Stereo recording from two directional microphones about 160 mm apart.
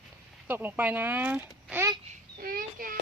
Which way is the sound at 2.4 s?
65° right (ahead or behind).